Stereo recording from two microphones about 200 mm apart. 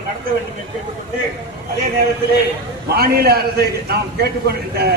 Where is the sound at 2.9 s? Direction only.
50° right (ahead or behind).